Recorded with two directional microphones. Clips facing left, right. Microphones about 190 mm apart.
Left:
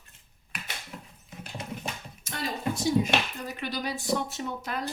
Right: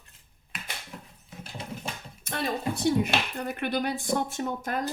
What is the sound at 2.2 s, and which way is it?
Speech, 60° right (ahead or behind).